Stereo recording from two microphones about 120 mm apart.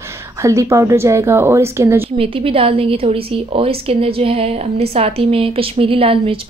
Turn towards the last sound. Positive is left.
turn(degrees=-50)  # may be behind; listen again after turning